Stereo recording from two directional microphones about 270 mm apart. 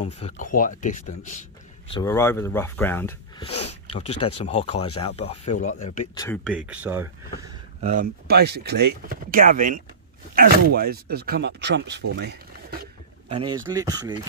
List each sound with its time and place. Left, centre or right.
0.0 s speech: left
2.0 s speech: centre
3.4 s speech: left
6.1 s speech: centre
7.8 s speech: right
12.2 s a sound: right
13.3 s speech: centre